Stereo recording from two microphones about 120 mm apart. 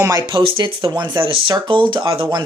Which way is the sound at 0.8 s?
35° right (ahead or behind).